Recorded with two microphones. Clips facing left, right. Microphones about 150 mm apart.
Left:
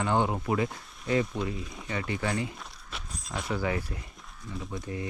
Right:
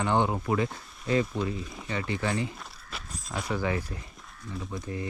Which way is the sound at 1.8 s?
25° right (ahead or behind).